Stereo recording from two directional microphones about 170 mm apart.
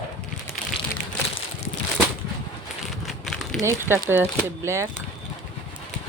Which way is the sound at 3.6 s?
15° right (ahead or behind).